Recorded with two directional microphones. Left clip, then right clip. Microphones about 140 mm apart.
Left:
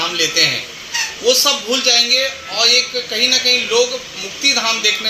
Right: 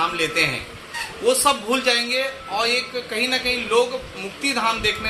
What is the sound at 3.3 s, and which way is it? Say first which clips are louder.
A man's voice: left 7 dB; 45° right (ahead or behind).